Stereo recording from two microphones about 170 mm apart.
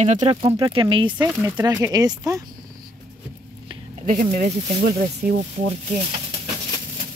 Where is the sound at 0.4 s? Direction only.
25° right (ahead or behind).